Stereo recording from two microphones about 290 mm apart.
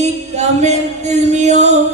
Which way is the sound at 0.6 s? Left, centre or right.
Right.